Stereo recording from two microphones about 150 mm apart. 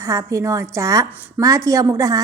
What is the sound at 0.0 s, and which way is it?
A woman's voice, 20° right (ahead or behind).